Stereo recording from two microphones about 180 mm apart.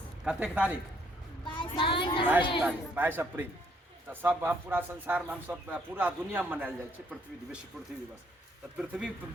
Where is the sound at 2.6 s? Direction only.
10° right (ahead or behind).